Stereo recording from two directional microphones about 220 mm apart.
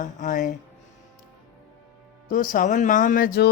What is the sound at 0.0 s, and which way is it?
Speech, 35° left (ahead or behind).